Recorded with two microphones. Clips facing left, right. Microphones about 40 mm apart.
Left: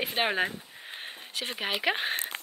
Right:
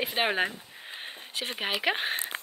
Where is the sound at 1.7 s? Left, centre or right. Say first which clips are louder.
Even; centre.